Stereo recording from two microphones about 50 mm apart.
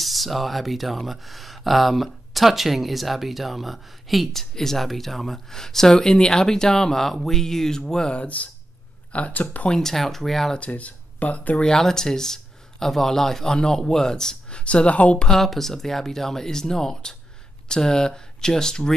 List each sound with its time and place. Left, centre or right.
0.0 s speech: centre
8.2 s speech: left
9.7 s speech: centre
10.7 s speech: left
11.6 s speech: centre
14.6 s speech: left
15.2 s speech: centre